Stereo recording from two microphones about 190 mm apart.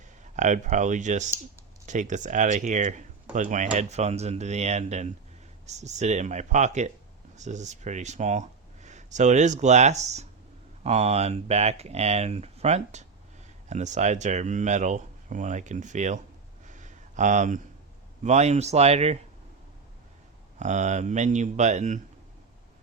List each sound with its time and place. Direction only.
0.3 s speech: 40° right (ahead or behind)
16.6 s a sound: 40° right (ahead or behind)
18.2 s speech: 35° right (ahead or behind)
20.6 s speech: 40° right (ahead or behind)